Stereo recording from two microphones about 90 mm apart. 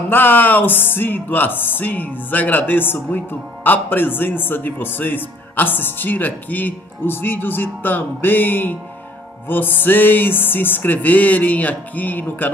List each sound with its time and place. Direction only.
0.1 s speech: 20° left (ahead or behind)